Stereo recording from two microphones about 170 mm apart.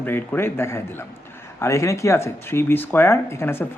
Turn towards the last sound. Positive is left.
turn(degrees=15)  # may be behind; listen again after turning